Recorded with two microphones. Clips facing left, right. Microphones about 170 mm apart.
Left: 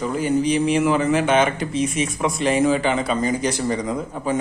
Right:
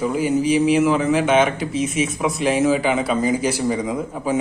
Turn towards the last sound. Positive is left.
turn(degrees=-5)  # may be behind; listen again after turning